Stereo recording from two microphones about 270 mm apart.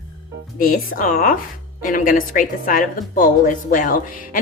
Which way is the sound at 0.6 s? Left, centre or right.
Left.